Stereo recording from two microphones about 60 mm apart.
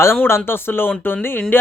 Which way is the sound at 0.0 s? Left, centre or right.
Left.